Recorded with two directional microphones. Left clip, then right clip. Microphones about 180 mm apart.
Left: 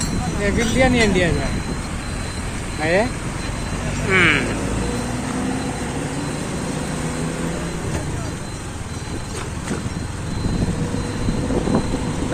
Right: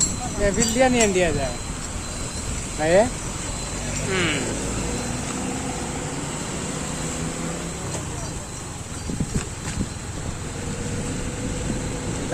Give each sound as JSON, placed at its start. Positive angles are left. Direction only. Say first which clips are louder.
{"t": 0.4, "sound": "speech", "louder": "left 1 dB", "side_deg": -45}
{"t": 2.8, "sound": "speech", "louder": "right 1 dB", "side_deg": -45}
{"t": 4.1, "sound": "speech", "louder": "left 9 dB", "side_deg": -15}